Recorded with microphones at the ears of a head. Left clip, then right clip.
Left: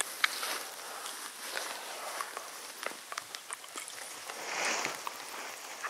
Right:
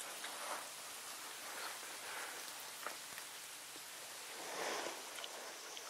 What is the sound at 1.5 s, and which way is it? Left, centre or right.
Walk, left.